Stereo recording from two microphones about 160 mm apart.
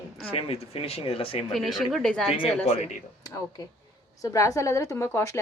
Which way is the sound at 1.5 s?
Centre (ahead or behind).